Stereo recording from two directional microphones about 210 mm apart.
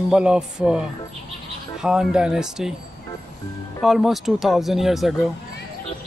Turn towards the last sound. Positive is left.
turn(degrees=0)  # may be behind; listen again after turning